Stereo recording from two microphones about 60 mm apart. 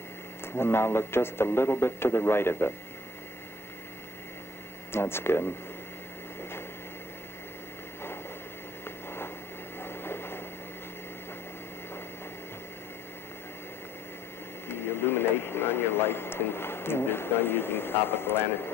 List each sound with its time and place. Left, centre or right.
0.5 s a man's voice: left
4.9 s speech: left
8.8 s a sound: left
14.7 s radio: left